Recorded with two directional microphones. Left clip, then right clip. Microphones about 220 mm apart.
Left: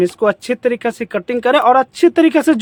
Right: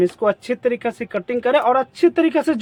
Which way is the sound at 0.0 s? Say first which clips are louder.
Left 3 dB; 35° left (ahead or behind).